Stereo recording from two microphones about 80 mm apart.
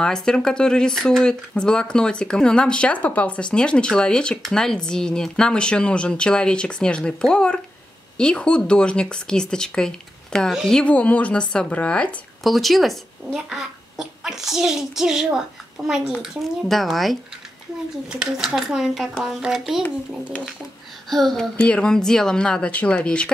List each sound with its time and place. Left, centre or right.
0.0 s speech: centre
12.4 s a child's voice: centre
21.1 s speech: centre